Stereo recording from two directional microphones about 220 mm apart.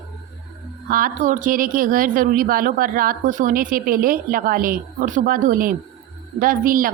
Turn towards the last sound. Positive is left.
turn(degrees=-40)  # may be behind; listen again after turning